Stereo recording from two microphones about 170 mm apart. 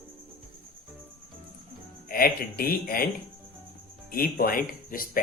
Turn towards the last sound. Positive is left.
turn(degrees=55)  # may be behind; listen again after turning